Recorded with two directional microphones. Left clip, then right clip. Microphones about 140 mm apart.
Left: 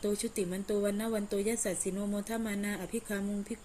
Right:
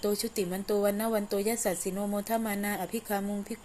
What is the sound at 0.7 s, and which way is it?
A woman's voice, 10° left (ahead or behind).